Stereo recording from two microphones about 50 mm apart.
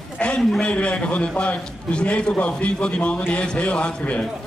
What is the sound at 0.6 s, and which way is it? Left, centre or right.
A man's voice, left.